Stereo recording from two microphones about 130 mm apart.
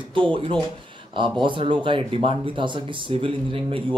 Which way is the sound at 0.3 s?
40° right (ahead or behind).